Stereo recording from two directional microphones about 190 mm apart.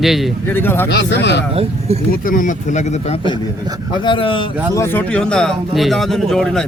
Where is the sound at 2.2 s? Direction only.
45° left (ahead or behind).